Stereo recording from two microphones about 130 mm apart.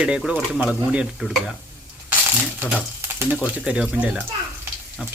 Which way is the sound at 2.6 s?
15° right (ahead or behind).